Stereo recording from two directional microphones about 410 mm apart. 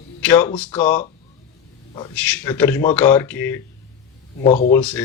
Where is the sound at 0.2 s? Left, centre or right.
Centre.